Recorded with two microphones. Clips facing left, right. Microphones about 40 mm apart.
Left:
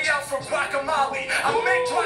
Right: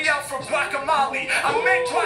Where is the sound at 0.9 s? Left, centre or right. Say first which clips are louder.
Right 5 dB; right.